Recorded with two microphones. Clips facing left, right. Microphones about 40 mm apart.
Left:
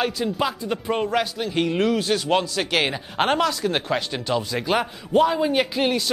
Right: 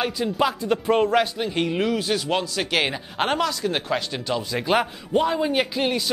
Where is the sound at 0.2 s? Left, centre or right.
Centre.